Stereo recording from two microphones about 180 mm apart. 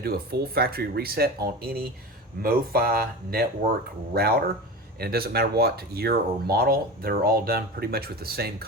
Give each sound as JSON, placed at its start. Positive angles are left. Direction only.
{"t": 0.0, "sound": "speech", "side_deg": -60}